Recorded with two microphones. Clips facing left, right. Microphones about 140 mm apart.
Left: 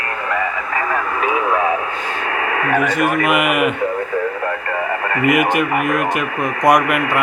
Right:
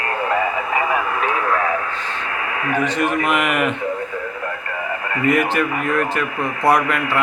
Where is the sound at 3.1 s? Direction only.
5° left (ahead or behind).